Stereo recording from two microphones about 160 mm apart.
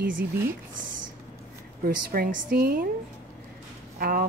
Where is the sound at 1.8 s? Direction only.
70° right (ahead or behind).